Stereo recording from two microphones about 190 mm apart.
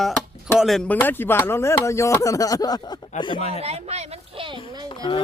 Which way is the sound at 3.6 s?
35° right (ahead or behind).